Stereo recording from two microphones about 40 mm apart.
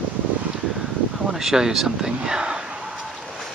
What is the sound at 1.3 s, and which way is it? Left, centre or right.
Speech, centre.